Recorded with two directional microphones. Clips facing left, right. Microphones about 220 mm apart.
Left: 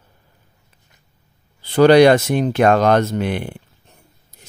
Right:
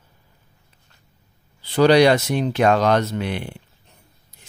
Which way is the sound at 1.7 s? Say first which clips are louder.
Left 4 dB; 50° left (ahead or behind).